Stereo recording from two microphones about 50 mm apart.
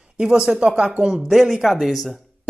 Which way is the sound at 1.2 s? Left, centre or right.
Centre.